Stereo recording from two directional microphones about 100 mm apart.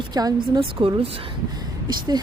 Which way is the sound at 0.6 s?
60° right (ahead or behind).